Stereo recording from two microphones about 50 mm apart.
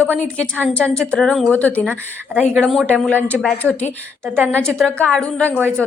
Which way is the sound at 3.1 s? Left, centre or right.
Left.